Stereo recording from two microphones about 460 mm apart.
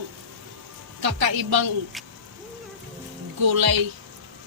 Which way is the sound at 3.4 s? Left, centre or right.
Right.